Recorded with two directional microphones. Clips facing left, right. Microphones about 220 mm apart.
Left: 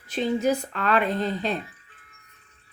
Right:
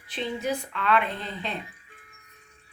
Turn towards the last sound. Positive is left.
turn(degrees=40)  # may be behind; listen again after turning